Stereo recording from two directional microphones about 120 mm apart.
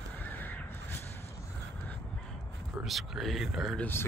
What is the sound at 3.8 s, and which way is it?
Speech, 20° left (ahead or behind).